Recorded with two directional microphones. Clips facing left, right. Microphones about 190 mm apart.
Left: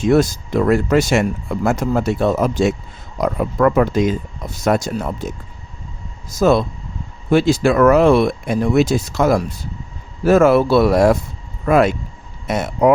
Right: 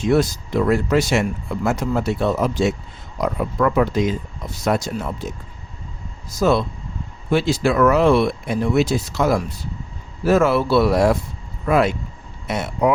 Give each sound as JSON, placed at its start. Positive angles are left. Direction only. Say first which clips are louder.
{"t": 0.0, "sound": "speech", "louder": "left 3 dB", "side_deg": 45}
{"t": 6.3, "sound": "speech", "louder": "left 3 dB", "side_deg": 45}